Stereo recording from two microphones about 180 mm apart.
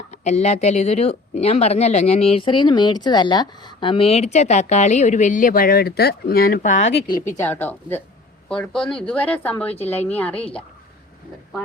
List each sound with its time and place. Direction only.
0.1 s speech: 40° left (ahead or behind)
7.3 s speech: 15° left (ahead or behind)